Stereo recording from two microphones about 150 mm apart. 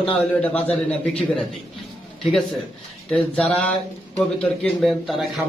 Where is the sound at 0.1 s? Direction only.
10° left (ahead or behind).